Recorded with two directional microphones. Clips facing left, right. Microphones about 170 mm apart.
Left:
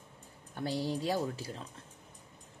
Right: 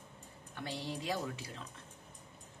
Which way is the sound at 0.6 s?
35° left (ahead or behind).